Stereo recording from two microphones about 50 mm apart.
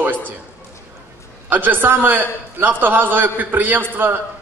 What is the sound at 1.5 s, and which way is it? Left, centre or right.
A man's voice, right.